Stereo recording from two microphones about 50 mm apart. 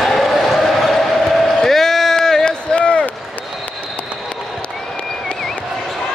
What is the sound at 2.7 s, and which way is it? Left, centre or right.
Run, left.